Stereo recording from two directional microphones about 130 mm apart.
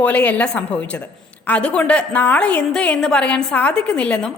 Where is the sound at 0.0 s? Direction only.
10° left (ahead or behind).